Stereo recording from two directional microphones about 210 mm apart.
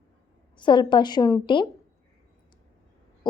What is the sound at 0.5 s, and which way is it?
Speech, 20° left (ahead or behind).